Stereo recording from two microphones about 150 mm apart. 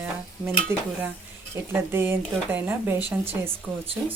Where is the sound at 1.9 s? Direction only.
15° right (ahead or behind).